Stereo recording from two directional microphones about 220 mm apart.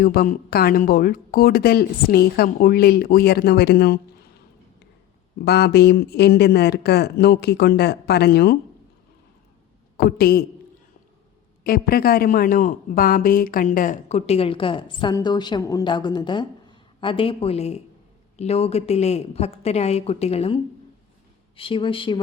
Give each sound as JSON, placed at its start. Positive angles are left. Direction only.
{"t": 0.0, "sound": "a woman's voice", "side_deg": 40}
{"t": 5.4, "sound": "a woman's voice", "side_deg": 45}
{"t": 10.0, "sound": "a woman's voice", "side_deg": 45}
{"t": 11.6, "sound": "a man's voice", "side_deg": 40}